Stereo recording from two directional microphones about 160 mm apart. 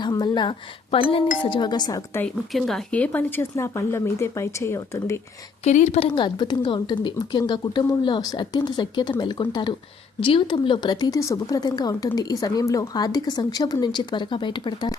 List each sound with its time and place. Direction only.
0.0 s a woman's voice: 25° left (ahead or behind)
2.2 s speech: centre (ahead or behind); by 5.2 s 15° left (ahead or behind)
5.6 s a woman's voice: 45° left (ahead or behind); by 14.9 s 30° left (ahead or behind)